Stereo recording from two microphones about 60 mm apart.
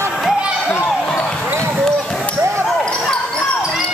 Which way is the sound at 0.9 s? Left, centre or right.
Centre.